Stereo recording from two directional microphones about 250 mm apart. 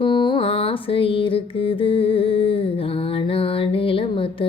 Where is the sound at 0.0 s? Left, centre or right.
Centre.